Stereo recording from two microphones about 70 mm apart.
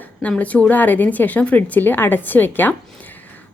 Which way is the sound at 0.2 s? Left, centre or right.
Left.